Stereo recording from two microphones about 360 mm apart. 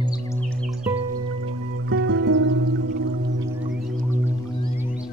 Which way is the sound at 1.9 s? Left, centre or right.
Right.